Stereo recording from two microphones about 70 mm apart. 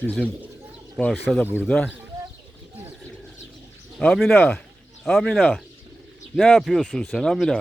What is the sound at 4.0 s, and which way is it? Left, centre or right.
Speech, centre.